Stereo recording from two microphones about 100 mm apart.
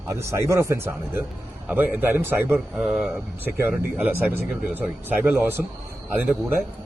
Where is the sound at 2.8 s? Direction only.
5° right (ahead or behind).